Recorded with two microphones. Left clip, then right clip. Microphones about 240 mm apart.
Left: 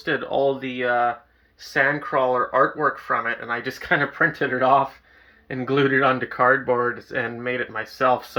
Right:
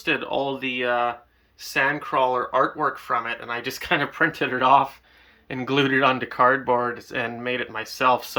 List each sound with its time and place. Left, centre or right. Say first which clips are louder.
0.0 s speech: left 3 dB; centre